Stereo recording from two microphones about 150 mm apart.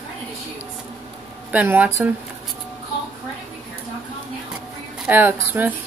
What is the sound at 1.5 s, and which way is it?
Speech, 10° right (ahead or behind).